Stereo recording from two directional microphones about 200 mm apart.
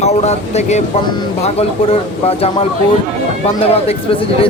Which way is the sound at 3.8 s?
30° left (ahead or behind).